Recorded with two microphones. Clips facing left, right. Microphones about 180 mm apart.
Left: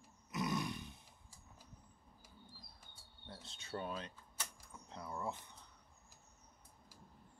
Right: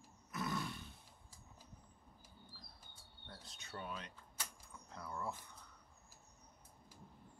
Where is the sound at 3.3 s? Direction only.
25° left (ahead or behind).